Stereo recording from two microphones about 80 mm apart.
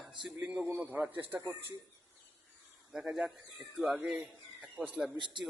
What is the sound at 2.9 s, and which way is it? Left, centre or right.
A man's voice, centre.